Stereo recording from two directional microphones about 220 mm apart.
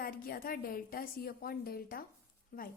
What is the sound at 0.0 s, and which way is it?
A woman's voice, 40° left (ahead or behind).